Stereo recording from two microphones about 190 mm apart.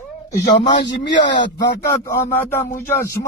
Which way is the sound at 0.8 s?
70° left (ahead or behind).